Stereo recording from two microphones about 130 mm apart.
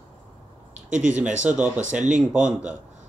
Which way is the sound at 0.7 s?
65° right (ahead or behind).